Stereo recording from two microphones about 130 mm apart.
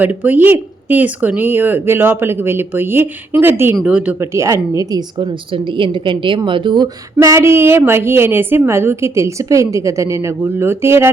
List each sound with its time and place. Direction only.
0.0 s speech: 15° right (ahead or behind)